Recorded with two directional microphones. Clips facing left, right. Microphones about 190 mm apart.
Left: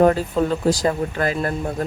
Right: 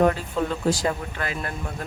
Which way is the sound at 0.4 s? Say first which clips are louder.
Left 5 dB; 35° left (ahead or behind).